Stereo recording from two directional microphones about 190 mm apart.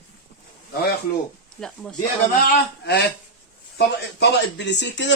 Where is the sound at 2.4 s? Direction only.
60° left (ahead or behind).